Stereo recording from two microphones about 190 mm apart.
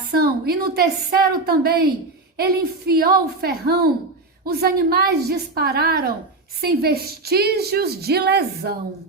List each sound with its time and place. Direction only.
0.1 s a woman's voice: 55° right (ahead or behind)